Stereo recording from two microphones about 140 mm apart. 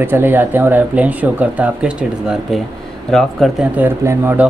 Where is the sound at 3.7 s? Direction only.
15° right (ahead or behind).